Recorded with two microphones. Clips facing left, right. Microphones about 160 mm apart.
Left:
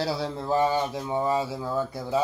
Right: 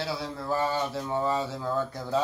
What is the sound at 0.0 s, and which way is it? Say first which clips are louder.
Speech: left 4 dB; 25° left (ahead or behind).